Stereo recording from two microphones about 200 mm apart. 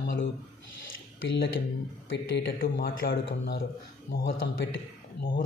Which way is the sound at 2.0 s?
60° left (ahead or behind).